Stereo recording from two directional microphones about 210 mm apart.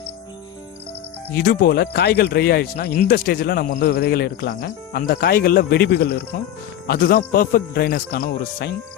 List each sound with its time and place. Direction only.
1.3 s speech: 45° left (ahead or behind)